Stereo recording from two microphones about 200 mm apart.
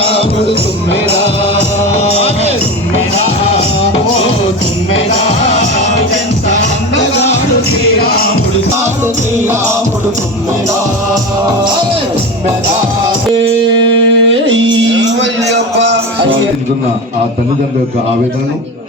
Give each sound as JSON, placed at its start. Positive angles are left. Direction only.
{"t": 2.0, "sound": "music", "side_deg": 30}
{"t": 7.9, "sound": "music", "side_deg": 50}
{"t": 13.8, "sound": "music", "side_deg": -70}